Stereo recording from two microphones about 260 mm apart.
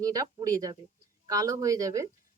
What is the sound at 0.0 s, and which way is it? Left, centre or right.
Speech, centre.